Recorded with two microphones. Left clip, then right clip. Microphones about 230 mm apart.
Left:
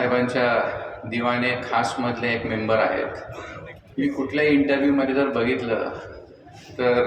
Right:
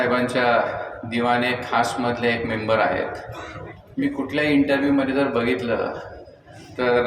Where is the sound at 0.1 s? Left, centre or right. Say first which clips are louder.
Right 1 dB; right.